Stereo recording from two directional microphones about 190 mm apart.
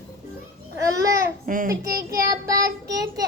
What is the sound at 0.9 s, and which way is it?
Babbling, 15° right (ahead or behind).